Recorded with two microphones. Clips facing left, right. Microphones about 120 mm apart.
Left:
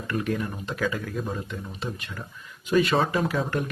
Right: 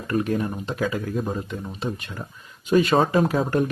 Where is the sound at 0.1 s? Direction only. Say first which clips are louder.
Right 5 dB; 35° right (ahead or behind).